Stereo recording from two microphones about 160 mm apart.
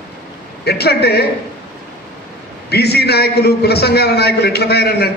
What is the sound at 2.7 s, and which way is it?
A man's voice, 90° left.